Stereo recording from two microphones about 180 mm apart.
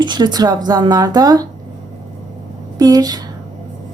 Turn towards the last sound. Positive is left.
turn(degrees=-20)  # may be behind; listen again after turning